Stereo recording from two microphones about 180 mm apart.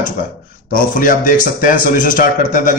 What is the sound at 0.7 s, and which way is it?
A man's voice, 50° left (ahead or behind).